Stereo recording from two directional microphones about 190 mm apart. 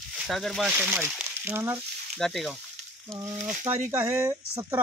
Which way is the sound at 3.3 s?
40° right (ahead or behind).